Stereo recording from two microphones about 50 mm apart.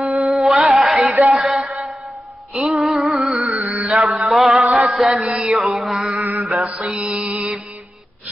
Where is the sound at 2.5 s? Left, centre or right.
Centre.